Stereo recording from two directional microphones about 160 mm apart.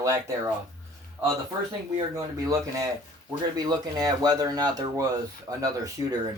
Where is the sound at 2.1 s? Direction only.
20° right (ahead or behind).